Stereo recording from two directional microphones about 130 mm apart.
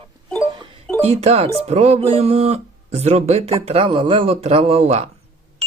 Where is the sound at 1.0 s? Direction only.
50° right (ahead or behind).